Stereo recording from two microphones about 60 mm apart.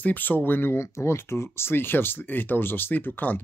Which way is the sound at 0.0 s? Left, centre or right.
Left.